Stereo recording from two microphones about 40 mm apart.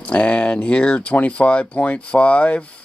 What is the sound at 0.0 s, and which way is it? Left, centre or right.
Speech, left.